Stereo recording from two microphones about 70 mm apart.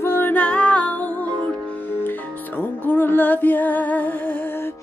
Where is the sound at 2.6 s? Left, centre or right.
Left.